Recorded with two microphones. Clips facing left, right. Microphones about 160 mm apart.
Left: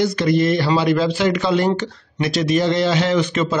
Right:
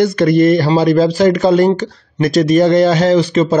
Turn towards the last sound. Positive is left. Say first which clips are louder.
# right 7 dB
turn(degrees=-35)  # may be behind; listen again after turning